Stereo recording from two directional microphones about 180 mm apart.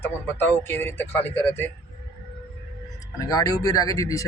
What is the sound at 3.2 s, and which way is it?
Speech, 20° left (ahead or behind).